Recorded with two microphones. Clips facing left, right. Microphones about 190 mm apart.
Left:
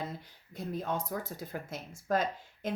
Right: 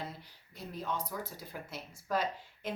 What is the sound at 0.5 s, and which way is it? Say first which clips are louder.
Speech: left 4 dB; 50° left (ahead or behind).